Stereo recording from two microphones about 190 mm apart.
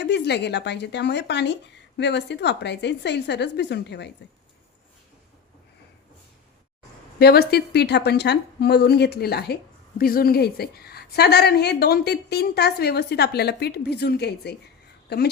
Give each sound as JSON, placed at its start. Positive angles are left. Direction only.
{"t": 0.0, "sound": "a woman's voice", "side_deg": 65}
{"t": 7.2, "sound": "a woman's voice", "side_deg": 55}